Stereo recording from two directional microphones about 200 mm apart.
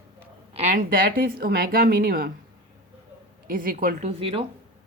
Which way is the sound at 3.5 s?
45° right (ahead or behind).